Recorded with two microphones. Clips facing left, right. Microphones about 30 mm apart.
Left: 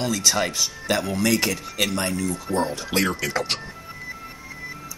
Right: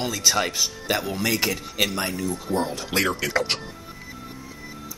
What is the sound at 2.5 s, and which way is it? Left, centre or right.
Speech, right.